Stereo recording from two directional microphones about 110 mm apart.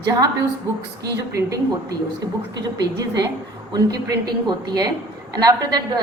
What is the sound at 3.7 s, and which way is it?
A woman's voice, 35° right (ahead or behind).